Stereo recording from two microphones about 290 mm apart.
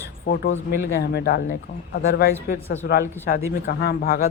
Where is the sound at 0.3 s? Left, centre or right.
Left.